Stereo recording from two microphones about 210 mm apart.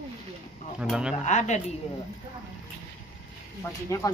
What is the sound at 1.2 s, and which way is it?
Speech, 35° left (ahead or behind).